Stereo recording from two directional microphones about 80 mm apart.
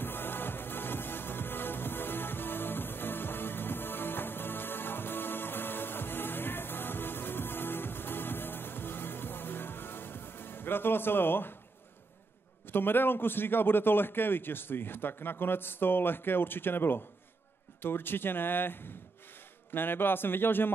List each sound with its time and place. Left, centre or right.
0.0 s music: left
12.7 s a man's voice: left